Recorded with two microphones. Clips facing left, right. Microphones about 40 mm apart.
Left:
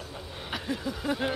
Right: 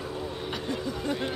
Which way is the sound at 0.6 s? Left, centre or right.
Centre.